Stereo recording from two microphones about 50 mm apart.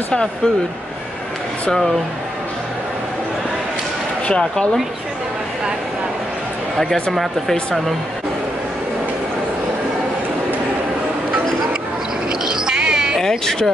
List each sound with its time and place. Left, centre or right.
4.3 s speech: centre
6.8 s speech: centre
12.3 s cat: centre
13.2 s speech: centre